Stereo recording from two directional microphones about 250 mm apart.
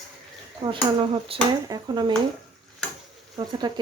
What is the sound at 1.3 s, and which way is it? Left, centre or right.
Speech, centre.